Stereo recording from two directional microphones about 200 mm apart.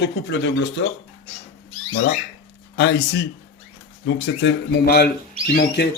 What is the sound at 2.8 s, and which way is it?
Speech, 60° left (ahead or behind).